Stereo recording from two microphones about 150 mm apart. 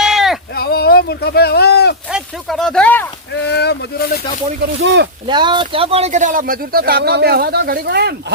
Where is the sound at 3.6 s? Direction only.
90° left.